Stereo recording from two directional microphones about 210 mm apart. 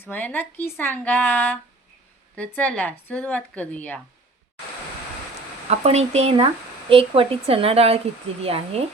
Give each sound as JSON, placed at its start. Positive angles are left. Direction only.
{"t": 0.0, "sound": "speech", "side_deg": 10}
{"t": 5.8, "sound": "speech", "side_deg": -30}